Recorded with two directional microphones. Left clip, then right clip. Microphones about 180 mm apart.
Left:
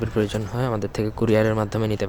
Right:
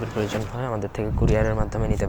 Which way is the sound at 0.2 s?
35° left (ahead or behind).